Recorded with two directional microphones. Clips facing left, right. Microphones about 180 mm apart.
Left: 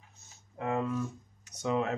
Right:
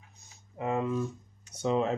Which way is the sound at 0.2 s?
20° right (ahead or behind).